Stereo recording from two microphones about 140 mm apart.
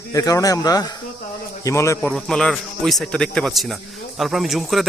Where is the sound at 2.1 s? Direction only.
5° left (ahead or behind).